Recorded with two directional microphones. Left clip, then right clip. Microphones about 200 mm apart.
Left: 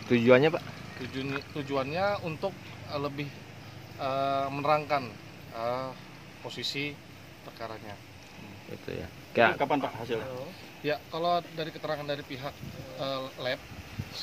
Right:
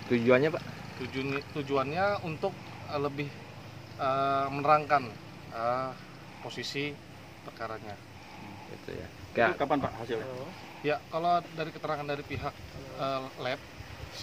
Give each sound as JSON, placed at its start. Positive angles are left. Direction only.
{"t": 0.1, "sound": "speech", "side_deg": 50}
{"t": 1.1, "sound": "speech", "side_deg": 5}
{"t": 9.3, "sound": "speech", "side_deg": 50}
{"t": 10.8, "sound": "speech", "side_deg": 5}